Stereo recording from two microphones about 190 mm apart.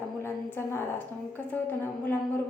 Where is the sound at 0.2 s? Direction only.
10° left (ahead or behind).